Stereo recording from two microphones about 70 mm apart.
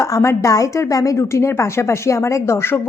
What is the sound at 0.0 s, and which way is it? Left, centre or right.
A woman's voice, left.